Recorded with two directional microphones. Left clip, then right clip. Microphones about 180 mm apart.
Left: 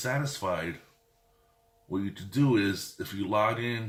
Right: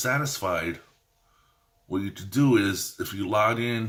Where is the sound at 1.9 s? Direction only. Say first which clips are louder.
Right 4 dB; 35° right (ahead or behind).